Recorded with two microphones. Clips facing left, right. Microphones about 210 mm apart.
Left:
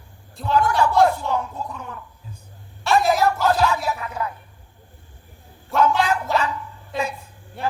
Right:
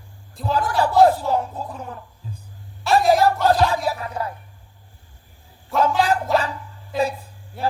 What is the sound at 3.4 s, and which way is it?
Speech, 35° right (ahead or behind).